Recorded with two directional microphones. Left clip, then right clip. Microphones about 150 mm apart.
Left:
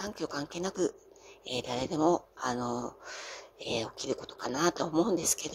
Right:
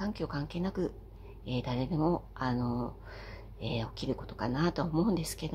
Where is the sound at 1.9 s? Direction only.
25° left (ahead or behind).